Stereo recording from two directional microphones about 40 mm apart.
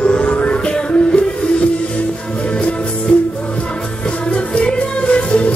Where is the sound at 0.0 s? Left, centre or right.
Left.